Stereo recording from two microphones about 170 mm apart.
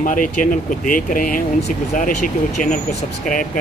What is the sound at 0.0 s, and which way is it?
Speech, 50° left (ahead or behind).